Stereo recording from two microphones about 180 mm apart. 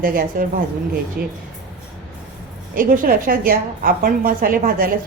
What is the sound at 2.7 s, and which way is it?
A woman's voice, 50° right (ahead or behind).